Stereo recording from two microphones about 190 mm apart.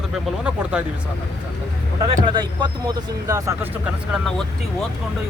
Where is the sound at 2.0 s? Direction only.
25° right (ahead or behind).